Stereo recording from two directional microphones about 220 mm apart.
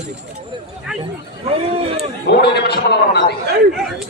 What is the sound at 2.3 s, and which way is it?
Speech, 50° left (ahead or behind).